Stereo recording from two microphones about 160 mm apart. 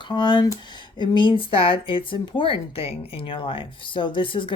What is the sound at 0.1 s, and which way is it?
Speech, 30° left (ahead or behind).